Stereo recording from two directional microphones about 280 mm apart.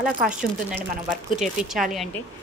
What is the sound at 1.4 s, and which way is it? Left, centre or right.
Speech, centre.